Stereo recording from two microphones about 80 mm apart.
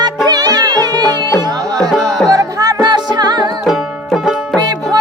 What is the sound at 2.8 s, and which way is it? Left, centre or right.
Music, right.